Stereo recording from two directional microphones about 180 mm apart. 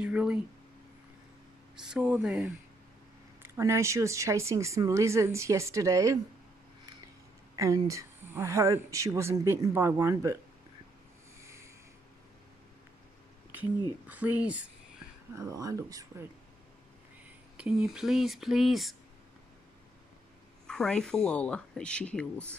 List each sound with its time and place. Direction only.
0.0 s speech: 5° right (ahead or behind)
1.8 s a woman's voice: 5° right (ahead or behind)
7.5 s a woman's voice: 15° right (ahead or behind)
11.4 s a sound: 15° right (ahead or behind)
14.0 s a woman's voice: 10° right (ahead or behind)
15.3 s speech: 20° right (ahead or behind)
17.6 s speech: 5° right (ahead or behind)
20.6 s speech: 5° left (ahead or behind)